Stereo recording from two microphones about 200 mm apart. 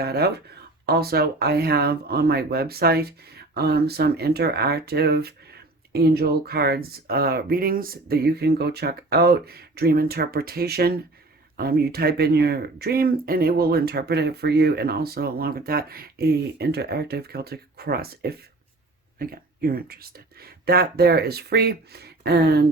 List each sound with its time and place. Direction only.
0.0 s speech: 50° right (ahead or behind)